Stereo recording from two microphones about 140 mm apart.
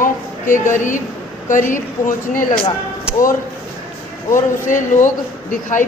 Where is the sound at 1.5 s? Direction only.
70° left (ahead or behind).